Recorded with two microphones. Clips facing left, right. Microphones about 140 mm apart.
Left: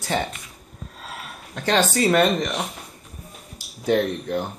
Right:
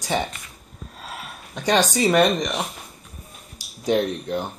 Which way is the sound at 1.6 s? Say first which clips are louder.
Even; 15° right (ahead or behind).